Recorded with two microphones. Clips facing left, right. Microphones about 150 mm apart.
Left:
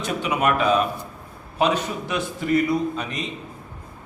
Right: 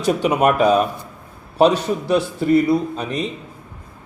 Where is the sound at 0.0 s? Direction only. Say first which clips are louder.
Right 6 dB; 40° right (ahead or behind).